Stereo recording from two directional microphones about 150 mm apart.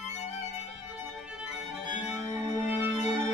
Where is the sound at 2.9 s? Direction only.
50° left (ahead or behind).